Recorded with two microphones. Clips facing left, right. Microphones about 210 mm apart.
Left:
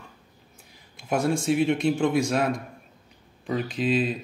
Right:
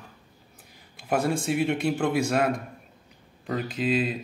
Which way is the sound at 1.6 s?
60° right (ahead or behind).